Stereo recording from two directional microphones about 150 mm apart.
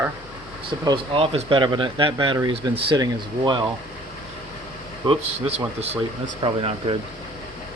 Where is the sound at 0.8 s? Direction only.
35° right (ahead or behind).